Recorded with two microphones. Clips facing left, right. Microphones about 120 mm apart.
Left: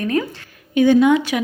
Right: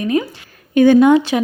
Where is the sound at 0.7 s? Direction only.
50° right (ahead or behind).